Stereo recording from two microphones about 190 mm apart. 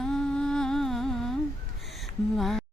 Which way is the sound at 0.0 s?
5° left (ahead or behind).